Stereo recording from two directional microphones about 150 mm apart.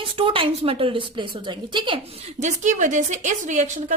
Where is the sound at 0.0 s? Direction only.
35° right (ahead or behind).